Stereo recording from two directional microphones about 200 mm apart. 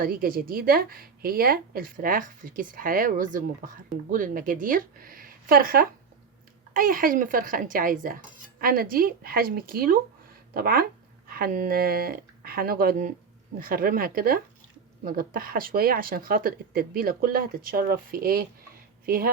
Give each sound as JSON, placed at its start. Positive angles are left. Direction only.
{"t": 0.0, "sound": "a woman's voice", "side_deg": -45}